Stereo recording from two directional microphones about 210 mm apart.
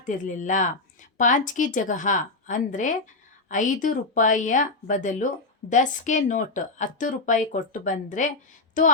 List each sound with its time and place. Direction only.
0.0 s speech: 35° left (ahead or behind)